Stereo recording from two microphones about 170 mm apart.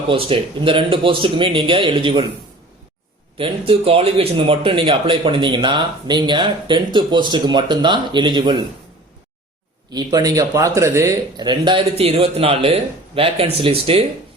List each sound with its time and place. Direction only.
0.1 s a man's voice: 30° right (ahead or behind)
3.3 s speech: 30° right (ahead or behind)
9.9 s speech: 25° right (ahead or behind)